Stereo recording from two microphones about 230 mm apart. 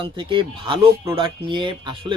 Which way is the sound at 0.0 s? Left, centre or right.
Right.